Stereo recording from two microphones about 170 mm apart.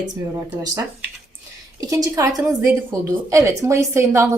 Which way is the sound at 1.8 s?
20° right (ahead or behind).